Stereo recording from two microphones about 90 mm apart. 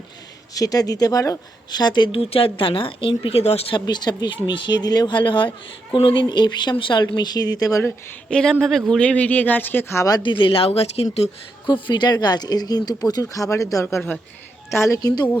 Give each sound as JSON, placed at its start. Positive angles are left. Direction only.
{"t": 0.5, "sound": "speech", "side_deg": 45}
{"t": 1.7, "sound": "speech", "side_deg": 55}
{"t": 2.3, "sound": "a woman's voice", "side_deg": 85}
{"t": 3.8, "sound": "speech", "side_deg": 55}
{"t": 8.3, "sound": "speech", "side_deg": 5}
{"t": 10.0, "sound": "a woman's voice", "side_deg": 35}
{"t": 10.2, "sound": "speech", "side_deg": 65}
{"t": 11.6, "sound": "speech", "side_deg": 60}
{"t": 13.8, "sound": "speech", "side_deg": 25}
{"t": 14.7, "sound": "a woman's voice", "side_deg": 35}